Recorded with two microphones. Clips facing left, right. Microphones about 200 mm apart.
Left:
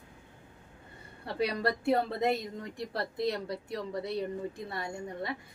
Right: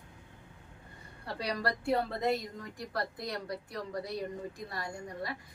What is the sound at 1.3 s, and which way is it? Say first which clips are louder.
A woman's voice: left 4 dB; 25° left (ahead or behind).